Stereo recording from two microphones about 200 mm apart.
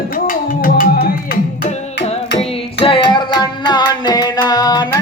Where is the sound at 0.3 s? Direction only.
45° left (ahead or behind).